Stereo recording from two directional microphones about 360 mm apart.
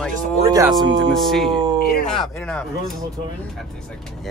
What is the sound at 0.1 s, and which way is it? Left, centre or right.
Speech, right.